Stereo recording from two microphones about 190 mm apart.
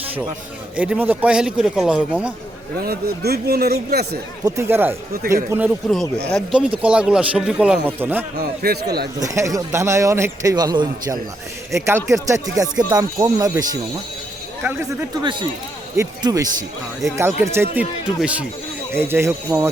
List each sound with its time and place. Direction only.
0.8 s speech: 10° right (ahead or behind)
2.8 s speech: 55° right (ahead or behind)
4.4 s a man's voice: 15° right (ahead or behind)
8.6 s speech: 55° right (ahead or behind)
9.2 s a man's voice: 15° right (ahead or behind)
15.2 s a man's voice: 25° right (ahead or behind)